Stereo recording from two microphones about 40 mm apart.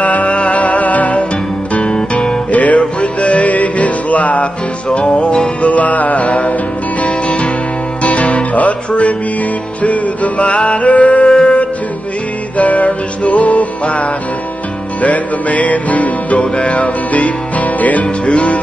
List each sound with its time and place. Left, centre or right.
0.0 s music: left
1.8 s guitar: left
2.5 s music: left
4.8 s music: left
5.6 s music: left
8.0 s music: left